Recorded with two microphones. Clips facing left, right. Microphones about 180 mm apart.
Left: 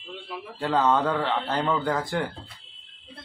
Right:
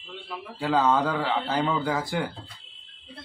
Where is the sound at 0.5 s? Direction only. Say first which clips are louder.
Even; centre (ahead or behind).